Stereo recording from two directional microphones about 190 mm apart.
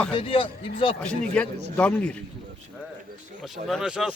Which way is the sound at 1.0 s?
5° left (ahead or behind).